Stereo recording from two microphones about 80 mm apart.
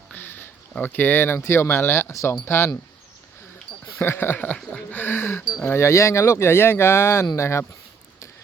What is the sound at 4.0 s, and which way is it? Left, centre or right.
Speech, left.